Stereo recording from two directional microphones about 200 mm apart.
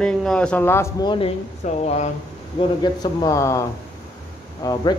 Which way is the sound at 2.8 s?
20° left (ahead or behind).